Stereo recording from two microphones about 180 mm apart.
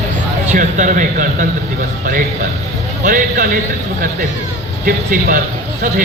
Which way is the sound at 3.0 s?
50° right (ahead or behind).